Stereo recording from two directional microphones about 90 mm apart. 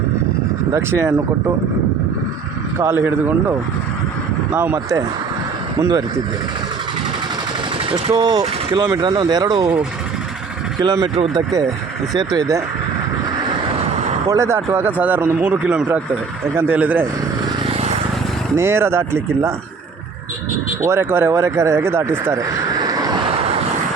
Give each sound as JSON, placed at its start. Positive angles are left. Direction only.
{"t": 0.7, "sound": "speech", "side_deg": -25}
{"t": 2.7, "sound": "speech", "side_deg": -30}
{"t": 4.5, "sound": "speech", "side_deg": -25}
{"t": 7.9, "sound": "speech", "side_deg": -75}
{"t": 10.8, "sound": "speech", "side_deg": -50}
{"t": 12.1, "sound": "speech", "side_deg": -45}
{"t": 14.3, "sound": "speech", "side_deg": -35}
{"t": 18.5, "sound": "speech", "side_deg": -30}
{"t": 20.8, "sound": "speech", "side_deg": -30}
{"t": 22.4, "sound": "a sound", "side_deg": -40}